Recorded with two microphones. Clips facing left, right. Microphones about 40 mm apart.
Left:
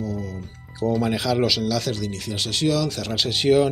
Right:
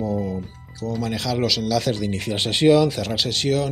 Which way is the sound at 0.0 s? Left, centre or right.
Right.